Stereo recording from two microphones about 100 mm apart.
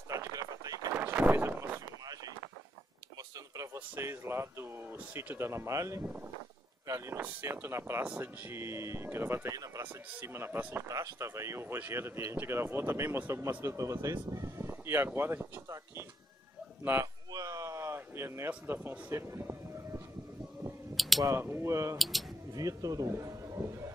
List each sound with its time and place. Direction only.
0.1 s a sound: 35° right (ahead or behind)
0.9 s a sound: 15° right (ahead or behind)
3.2 s speech: 35° right (ahead or behind)
6.0 s speech: 20° right (ahead or behind)
8.0 s speech: 15° right (ahead or behind)
9.5 s speech: 35° right (ahead or behind)
9.8 s speech: 25° right (ahead or behind)
10.9 s speech: 35° right (ahead or behind)
17.0 s a sound: 35° right (ahead or behind)
18.7 s speech: 20° right (ahead or behind)
20.9 s a sound: centre (ahead or behind)
21.4 s speech: 25° right (ahead or behind)
21.9 s speech: centre (ahead or behind)
22.5 s speech: 35° right (ahead or behind)